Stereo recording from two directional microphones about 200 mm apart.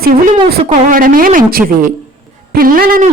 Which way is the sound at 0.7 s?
45° right (ahead or behind).